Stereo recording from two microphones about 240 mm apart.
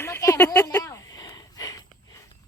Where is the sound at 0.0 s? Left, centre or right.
Centre.